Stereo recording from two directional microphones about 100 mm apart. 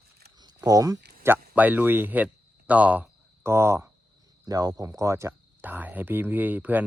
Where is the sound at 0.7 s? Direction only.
35° right (ahead or behind).